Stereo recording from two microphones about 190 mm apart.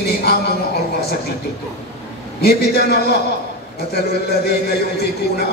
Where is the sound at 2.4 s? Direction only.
55° left (ahead or behind).